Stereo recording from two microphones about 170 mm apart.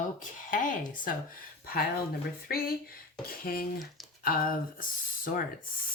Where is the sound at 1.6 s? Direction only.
60° left (ahead or behind).